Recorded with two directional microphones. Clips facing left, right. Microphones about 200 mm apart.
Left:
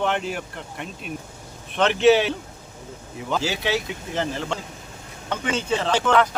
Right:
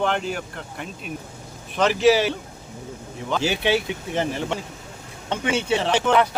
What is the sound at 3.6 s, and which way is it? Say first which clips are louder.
Speech: right 3 dB; 20° right (ahead or behind).